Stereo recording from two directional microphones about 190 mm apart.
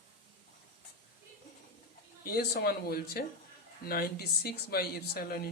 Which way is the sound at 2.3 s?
55° left (ahead or behind).